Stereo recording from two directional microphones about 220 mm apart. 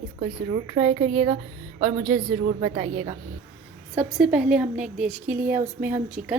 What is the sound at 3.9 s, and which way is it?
A woman's voice, 5° right (ahead or behind).